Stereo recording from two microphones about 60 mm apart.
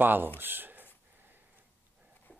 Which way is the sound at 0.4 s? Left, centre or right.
Right.